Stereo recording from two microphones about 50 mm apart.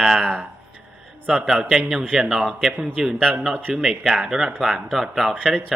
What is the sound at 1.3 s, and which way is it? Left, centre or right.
A man's voice, centre.